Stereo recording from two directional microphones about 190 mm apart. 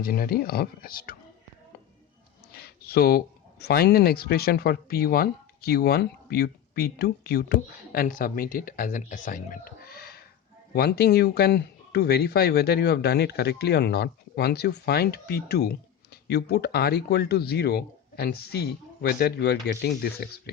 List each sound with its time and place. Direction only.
0.0 s speech: 50° left (ahead or behind)
2.5 s speech: 55° left (ahead or behind)